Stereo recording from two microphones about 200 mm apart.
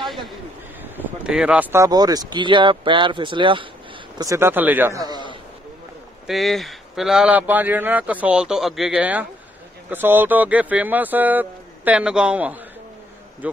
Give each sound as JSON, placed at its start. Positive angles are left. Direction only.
{"t": 0.9, "sound": "speech", "side_deg": -5}
{"t": 4.2, "sound": "speech", "side_deg": -15}
{"t": 6.2, "sound": "speech", "side_deg": 0}